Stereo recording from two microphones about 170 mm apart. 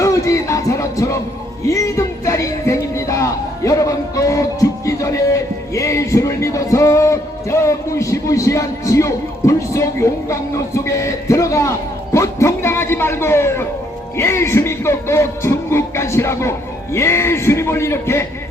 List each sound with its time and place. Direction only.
0.0 s music: 20° left (ahead or behind)